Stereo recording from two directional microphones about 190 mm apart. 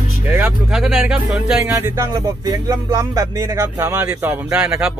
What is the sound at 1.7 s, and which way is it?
Speech, 15° right (ahead or behind).